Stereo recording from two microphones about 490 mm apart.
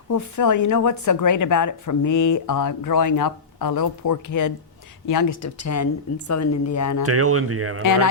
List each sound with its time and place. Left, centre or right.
0.1 s speech: left
7.0 s speech: right
7.8 s speech: left